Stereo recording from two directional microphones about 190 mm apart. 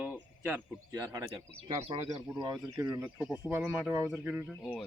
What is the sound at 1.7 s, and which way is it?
Speech, 30° right (ahead or behind).